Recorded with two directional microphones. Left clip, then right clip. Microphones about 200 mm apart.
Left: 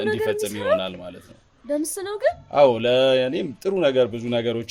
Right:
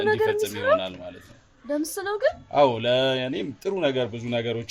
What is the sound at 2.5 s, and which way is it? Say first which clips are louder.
Speech: left 4 dB; 55° left (ahead or behind).